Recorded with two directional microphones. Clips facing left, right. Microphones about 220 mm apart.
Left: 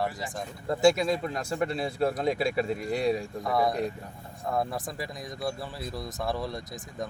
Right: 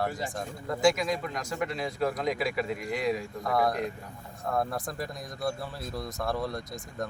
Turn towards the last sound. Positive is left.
turn(degrees=0)  # may be behind; listen again after turning